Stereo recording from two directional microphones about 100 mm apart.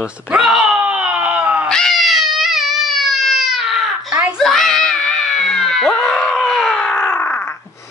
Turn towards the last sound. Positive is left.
turn(degrees=25)  # may be behind; listen again after turning